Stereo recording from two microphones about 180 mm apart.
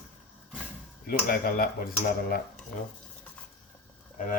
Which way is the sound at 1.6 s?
55° left (ahead or behind).